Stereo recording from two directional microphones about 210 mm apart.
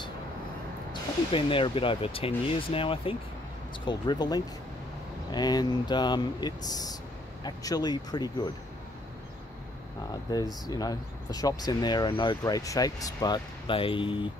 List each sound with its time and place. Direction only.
1.3 s speech: 25° left (ahead or behind)
10.3 s speech: 20° left (ahead or behind)